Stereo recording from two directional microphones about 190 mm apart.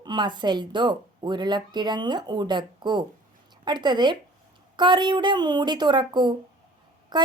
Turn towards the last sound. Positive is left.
turn(degrees=-25)  # may be behind; listen again after turning